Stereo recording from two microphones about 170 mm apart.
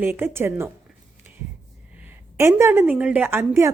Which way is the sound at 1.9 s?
10° right (ahead or behind).